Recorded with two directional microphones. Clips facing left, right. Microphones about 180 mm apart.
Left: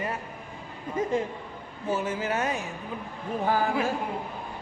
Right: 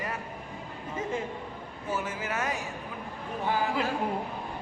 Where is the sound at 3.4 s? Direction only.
45° left (ahead or behind).